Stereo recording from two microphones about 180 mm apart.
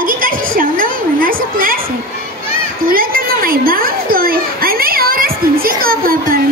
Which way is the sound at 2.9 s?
55° right (ahead or behind).